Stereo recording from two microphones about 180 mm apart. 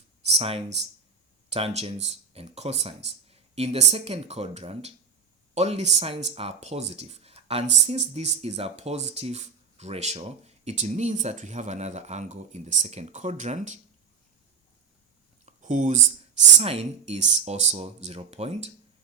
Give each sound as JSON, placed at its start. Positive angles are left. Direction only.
{"t": 0.3, "sound": "speech", "side_deg": -35}
{"t": 15.4, "sound": "speech", "side_deg": -45}